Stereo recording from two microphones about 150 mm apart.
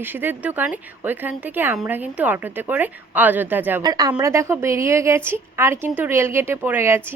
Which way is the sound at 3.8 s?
25° right (ahead or behind).